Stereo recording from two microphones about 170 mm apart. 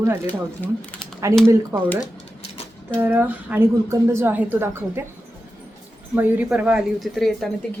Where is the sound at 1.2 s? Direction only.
15° right (ahead or behind).